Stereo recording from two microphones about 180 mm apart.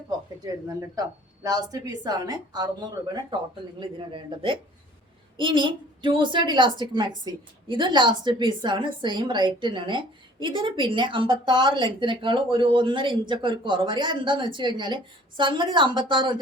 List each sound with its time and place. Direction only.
0.4 s a woman's voice: 15° right (ahead or behind)